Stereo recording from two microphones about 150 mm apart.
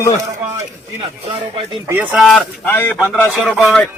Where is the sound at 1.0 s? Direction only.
35° right (ahead or behind).